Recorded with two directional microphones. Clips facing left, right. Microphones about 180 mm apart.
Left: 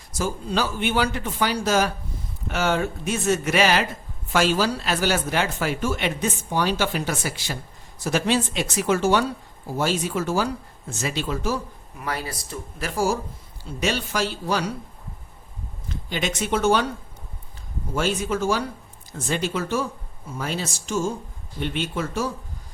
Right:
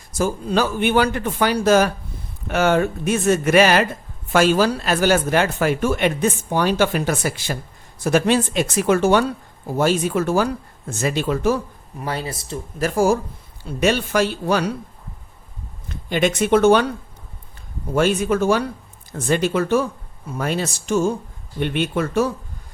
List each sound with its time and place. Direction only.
0.2 s speech: 50° right (ahead or behind)
11.9 s speech: 30° right (ahead or behind)
12.8 s speech: 50° right (ahead or behind)
15.9 s speech: 55° right (ahead or behind)
17.9 s speech: 60° right (ahead or behind)